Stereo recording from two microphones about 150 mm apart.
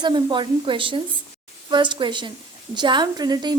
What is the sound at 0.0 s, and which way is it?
A woman's voice, 30° right (ahead or behind).